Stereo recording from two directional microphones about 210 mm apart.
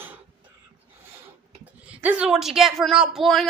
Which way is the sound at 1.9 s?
5° right (ahead or behind).